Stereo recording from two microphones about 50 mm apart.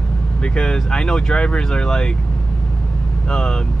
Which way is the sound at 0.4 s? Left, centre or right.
Centre.